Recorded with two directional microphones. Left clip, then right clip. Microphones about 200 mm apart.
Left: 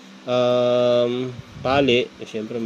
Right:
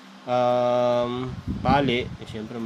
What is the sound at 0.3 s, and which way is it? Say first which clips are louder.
Speech: left 3 dB; 15° right (ahead or behind).